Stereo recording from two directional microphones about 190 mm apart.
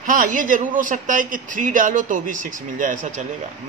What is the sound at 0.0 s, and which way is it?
A man's voice, 45° right (ahead or behind).